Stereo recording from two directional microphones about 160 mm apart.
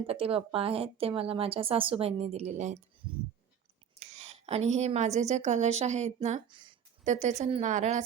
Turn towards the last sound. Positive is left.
turn(degrees=-50)  # may be behind; listen again after turning